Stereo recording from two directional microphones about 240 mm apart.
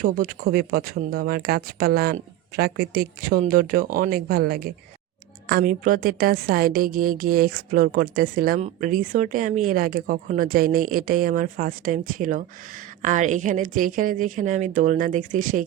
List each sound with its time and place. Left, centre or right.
0.0 s a woman's voice: right